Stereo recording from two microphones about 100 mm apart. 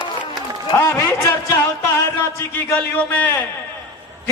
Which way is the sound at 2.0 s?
25° left (ahead or behind).